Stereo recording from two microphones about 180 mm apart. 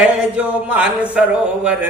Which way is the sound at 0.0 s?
5° right (ahead or behind).